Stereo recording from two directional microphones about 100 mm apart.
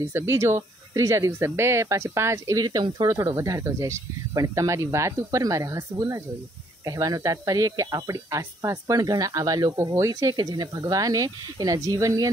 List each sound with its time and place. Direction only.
0.0 s speech: 30° right (ahead or behind)
10.3 s speech: 45° right (ahead or behind)